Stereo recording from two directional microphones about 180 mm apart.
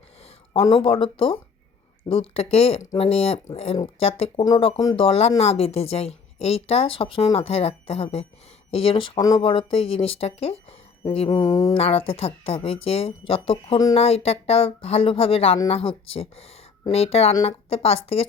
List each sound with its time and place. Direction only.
0.5 s speech: 30° left (ahead or behind)
11.3 s speech: 20° left (ahead or behind)
11.7 s speech: 35° left (ahead or behind)